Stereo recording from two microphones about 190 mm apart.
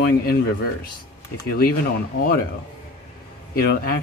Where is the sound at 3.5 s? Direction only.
50° left (ahead or behind).